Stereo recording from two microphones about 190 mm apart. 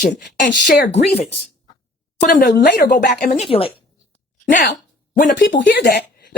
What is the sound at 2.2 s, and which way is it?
Speech, 40° left (ahead or behind).